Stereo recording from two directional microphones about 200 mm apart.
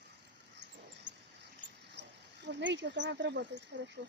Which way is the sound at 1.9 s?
60° right (ahead or behind).